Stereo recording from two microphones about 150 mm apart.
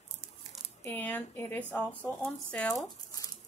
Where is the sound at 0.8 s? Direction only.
10° left (ahead or behind).